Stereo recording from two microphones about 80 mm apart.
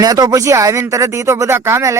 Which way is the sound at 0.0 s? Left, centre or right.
Right.